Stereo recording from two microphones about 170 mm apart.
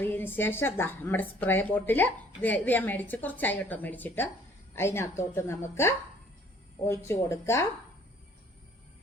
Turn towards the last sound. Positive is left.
turn(degrees=15)  # may be behind; listen again after turning